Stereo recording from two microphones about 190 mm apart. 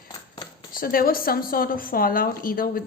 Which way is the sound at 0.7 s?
50° left (ahead or behind).